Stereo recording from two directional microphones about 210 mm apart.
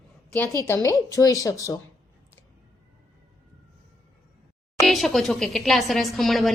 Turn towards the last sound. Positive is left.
turn(degrees=0)  # may be behind; listen again after turning